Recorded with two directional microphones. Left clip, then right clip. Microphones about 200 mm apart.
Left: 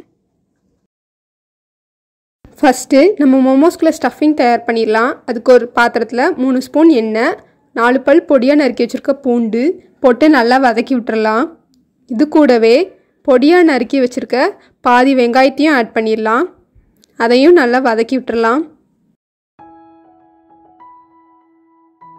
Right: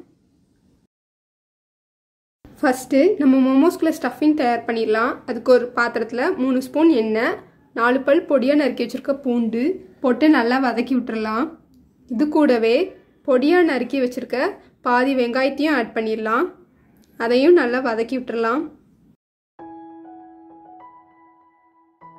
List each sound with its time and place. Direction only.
2.5 s speech: 40° left (ahead or behind)